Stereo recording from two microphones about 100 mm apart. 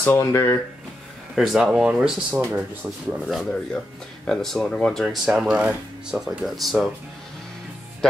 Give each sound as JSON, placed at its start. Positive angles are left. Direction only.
{"t": 0.2, "sound": "speech", "side_deg": 30}
{"t": 1.3, "sound": "speech", "side_deg": -5}